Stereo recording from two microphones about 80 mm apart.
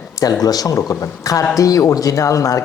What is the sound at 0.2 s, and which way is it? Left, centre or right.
A man's voice, left.